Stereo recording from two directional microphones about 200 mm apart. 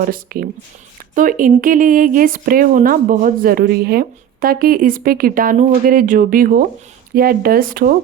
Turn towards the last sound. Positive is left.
turn(degrees=-45)  # may be behind; listen again after turning